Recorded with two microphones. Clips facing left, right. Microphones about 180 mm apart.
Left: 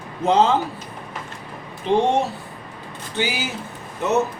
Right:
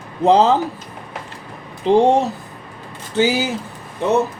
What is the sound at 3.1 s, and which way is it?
Speech, 40° right (ahead or behind).